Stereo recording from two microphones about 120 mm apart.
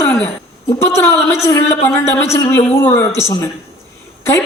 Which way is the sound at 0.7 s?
20° left (ahead or behind).